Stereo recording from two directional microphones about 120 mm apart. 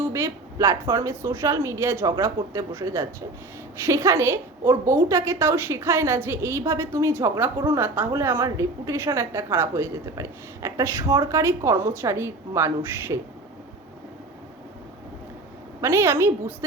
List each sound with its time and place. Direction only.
0.0 s a woman's voice: 25° right (ahead or behind)
15.8 s a woman's voice: 20° right (ahead or behind)